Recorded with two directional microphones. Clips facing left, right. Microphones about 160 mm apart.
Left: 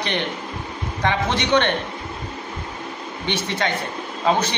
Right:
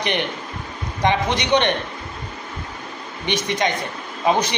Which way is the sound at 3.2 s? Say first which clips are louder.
Right 2 dB; 15° right (ahead or behind).